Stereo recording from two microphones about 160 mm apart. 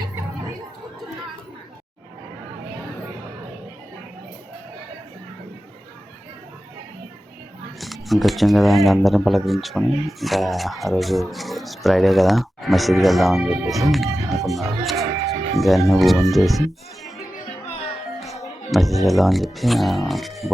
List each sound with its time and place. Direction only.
7.8 s speech: centre (ahead or behind)
18.7 s speech: centre (ahead or behind)